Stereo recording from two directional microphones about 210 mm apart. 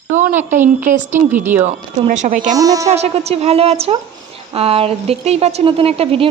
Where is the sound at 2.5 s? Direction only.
15° right (ahead or behind).